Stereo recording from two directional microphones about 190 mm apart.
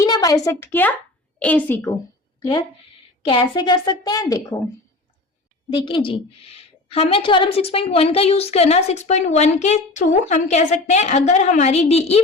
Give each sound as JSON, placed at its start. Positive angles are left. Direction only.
{"t": 0.0, "sound": "a woman's voice", "side_deg": 20}
{"t": 3.2, "sound": "a woman's voice", "side_deg": 25}
{"t": 5.7, "sound": "a woman's voice", "side_deg": 25}